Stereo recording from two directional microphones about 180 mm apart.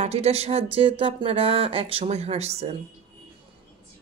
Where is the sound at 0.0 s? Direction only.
35° right (ahead or behind).